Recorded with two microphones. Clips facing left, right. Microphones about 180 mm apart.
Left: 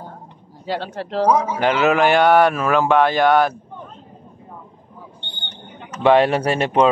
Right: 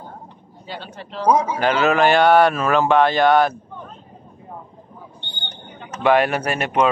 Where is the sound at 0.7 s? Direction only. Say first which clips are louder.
Left 9 dB; 90° left.